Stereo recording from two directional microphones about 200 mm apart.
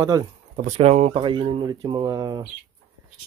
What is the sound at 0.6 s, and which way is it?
Speech, 30° right (ahead or behind).